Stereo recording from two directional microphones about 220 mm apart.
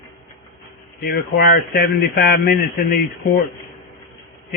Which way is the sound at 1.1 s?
45° left (ahead or behind).